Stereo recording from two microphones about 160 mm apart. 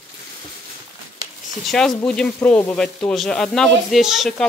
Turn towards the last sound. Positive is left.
turn(degrees=0)  # may be behind; listen again after turning